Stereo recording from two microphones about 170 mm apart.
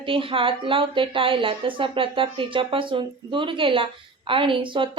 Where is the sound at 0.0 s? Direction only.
30° right (ahead or behind).